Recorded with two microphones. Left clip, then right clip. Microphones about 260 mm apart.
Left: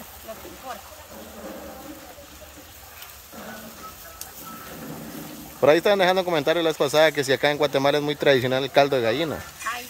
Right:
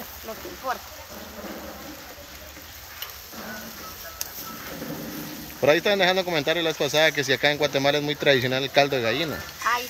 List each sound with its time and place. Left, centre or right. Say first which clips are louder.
5.6 s speech: left 2 dB; centre